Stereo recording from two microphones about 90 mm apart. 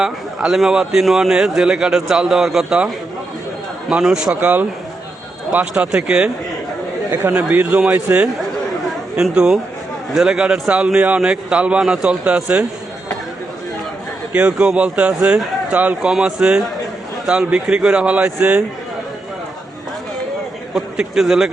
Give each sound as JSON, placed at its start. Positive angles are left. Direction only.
{"t": 0.0, "sound": "a man's voice", "side_deg": -5}
{"t": 5.5, "sound": "a man's voice", "side_deg": -15}
{"t": 7.3, "sound": "a man's voice", "side_deg": -15}
{"t": 14.3, "sound": "a man's voice", "side_deg": -10}
{"t": 16.0, "sound": "a man's voice", "side_deg": -5}
{"t": 20.7, "sound": "a man's voice", "side_deg": -5}